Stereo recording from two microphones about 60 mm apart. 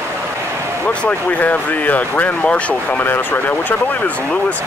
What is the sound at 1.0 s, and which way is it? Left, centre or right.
Speech, left.